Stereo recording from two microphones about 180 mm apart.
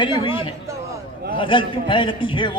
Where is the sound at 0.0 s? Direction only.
30° left (ahead or behind).